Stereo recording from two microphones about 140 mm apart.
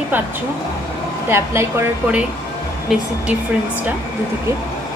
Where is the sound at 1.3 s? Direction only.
20° right (ahead or behind).